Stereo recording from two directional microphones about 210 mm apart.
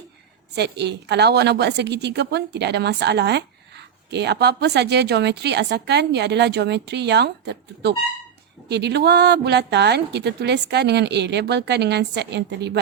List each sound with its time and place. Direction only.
0.5 s a woman's voice: 50° right (ahead or behind)